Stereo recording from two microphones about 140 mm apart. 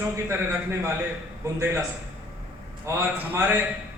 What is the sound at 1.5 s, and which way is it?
Speech, 20° right (ahead or behind).